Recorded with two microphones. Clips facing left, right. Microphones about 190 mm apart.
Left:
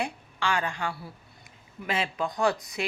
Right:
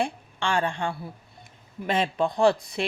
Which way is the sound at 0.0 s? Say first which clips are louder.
Right 3 dB; 30° right (ahead or behind).